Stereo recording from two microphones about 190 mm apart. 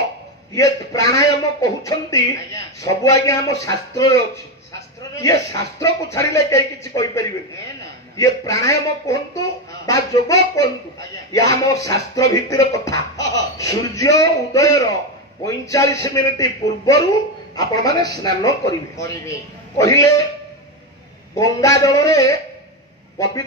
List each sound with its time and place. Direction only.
0.6 s speech: 15° left (ahead or behind)
21.4 s a man's voice: 15° left (ahead or behind)